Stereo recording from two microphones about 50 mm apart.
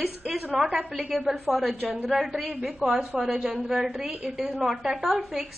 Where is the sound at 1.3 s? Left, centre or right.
Centre.